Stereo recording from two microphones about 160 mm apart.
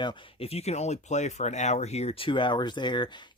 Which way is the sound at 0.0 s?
35° left (ahead or behind).